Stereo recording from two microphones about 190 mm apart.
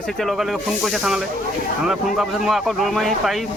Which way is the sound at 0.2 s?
Centre (ahead or behind).